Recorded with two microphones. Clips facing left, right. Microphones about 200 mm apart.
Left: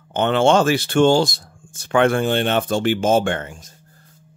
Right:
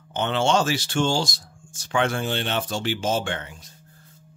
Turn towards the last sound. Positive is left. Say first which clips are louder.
# left 7 dB
turn(degrees=50)  # may be behind; listen again after turning